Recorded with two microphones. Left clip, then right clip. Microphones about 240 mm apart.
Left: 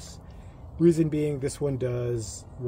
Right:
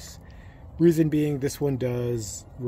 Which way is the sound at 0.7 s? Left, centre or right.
Right.